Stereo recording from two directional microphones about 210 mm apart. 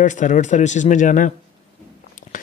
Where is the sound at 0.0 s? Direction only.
35° left (ahead or behind).